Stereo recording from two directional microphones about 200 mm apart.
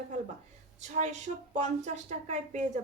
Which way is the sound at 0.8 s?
35° right (ahead or behind).